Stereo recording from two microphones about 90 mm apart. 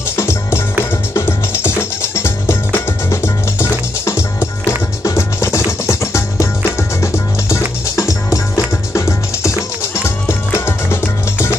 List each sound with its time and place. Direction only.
0.1 s music: 30° left (ahead or behind)